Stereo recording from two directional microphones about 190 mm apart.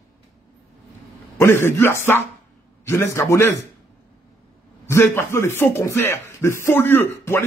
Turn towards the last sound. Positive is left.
turn(degrees=10)  # may be behind; listen again after turning